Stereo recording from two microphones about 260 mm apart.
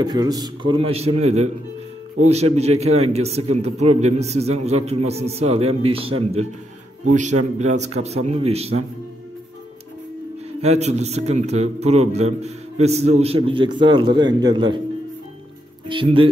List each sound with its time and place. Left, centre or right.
0.0 s a man's voice: centre
10.6 s a man's voice: right
15.9 s a man's voice: centre